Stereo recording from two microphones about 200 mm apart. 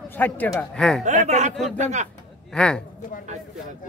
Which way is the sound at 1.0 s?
35° right (ahead or behind).